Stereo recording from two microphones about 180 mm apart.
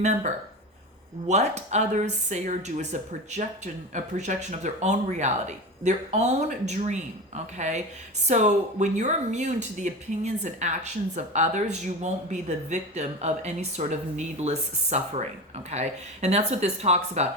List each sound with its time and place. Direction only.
0.0 s speech: 40° right (ahead or behind)